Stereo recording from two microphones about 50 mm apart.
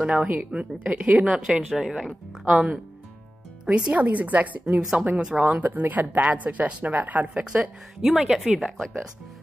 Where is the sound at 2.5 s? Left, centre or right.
Right.